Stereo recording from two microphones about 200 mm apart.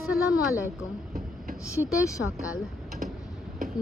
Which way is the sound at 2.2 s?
70° left (ahead or behind).